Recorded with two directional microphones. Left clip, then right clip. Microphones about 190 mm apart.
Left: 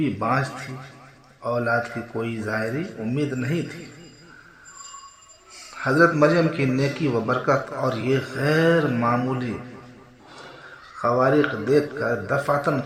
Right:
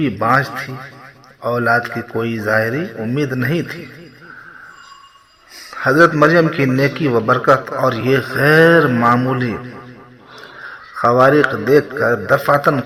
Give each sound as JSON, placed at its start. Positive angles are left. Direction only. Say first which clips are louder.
{"t": 0.0, "sound": "a man's voice", "louder": "right 8 dB", "side_deg": -30}
{"t": 5.7, "sound": "a man's voice", "louder": "right 7 dB", "side_deg": -25}
{"t": 10.9, "sound": "a man's voice", "louder": "right 8 dB", "side_deg": -35}